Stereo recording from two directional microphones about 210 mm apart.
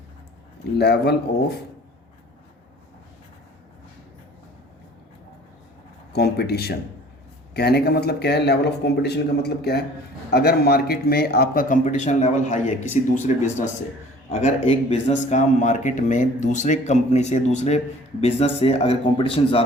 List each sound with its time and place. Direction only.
0.8 s a man's voice: 50° left (ahead or behind)
6.1 s a man's voice: 50° left (ahead or behind); by 19.6 s 25° left (ahead or behind)